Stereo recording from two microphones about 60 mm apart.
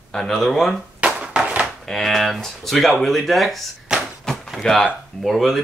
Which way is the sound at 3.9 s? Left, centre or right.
Centre.